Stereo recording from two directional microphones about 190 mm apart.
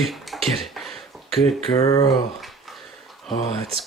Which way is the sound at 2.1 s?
Centre (ahead or behind).